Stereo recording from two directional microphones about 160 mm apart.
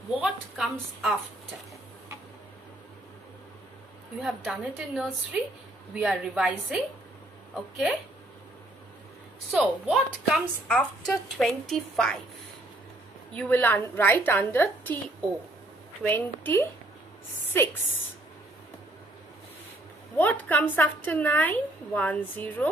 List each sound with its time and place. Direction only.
0.2 s a woman's voice: 5° right (ahead or behind)
4.2 s a woman's voice: 5° right (ahead or behind)
9.5 s a woman's voice: centre (ahead or behind)
13.3 s a woman's voice: 10° left (ahead or behind)
16.0 s a woman's voice: 10° left (ahead or behind)
20.2 s a woman's voice: 10° left (ahead or behind)